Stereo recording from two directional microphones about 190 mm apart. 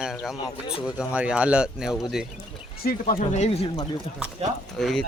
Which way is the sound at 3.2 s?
35° left (ahead or behind).